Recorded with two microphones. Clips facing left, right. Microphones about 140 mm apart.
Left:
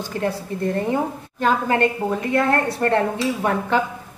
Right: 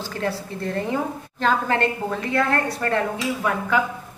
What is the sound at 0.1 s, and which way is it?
A woman's voice, 20° left (ahead or behind).